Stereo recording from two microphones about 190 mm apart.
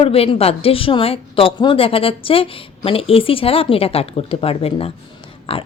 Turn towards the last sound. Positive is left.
turn(degrees=30)  # may be behind; listen again after turning